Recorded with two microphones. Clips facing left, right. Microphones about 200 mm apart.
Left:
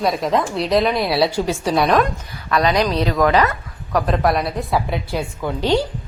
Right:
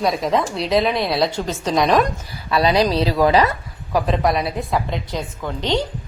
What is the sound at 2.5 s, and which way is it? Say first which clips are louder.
Speech: right 1 dB; 30° right (ahead or behind).